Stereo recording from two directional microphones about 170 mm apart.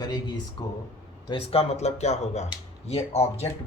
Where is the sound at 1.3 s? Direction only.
35° left (ahead or behind).